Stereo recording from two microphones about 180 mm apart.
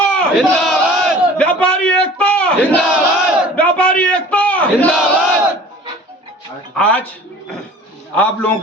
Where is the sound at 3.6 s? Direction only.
5° left (ahead or behind).